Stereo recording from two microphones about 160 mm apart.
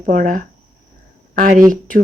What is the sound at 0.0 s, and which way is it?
Speech, 55° right (ahead or behind).